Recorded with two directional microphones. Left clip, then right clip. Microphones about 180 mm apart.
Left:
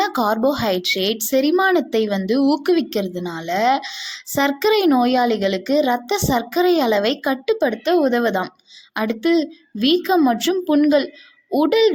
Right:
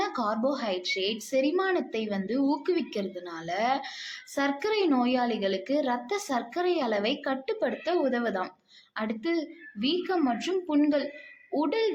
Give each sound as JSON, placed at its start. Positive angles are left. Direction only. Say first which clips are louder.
{"t": 0.0, "sound": "a woman's voice", "louder": "left 10 dB", "side_deg": 40}